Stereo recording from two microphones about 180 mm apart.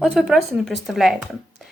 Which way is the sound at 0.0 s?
5° right (ahead or behind).